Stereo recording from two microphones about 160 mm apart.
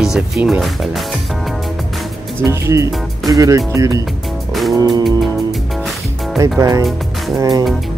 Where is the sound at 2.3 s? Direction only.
20° right (ahead or behind).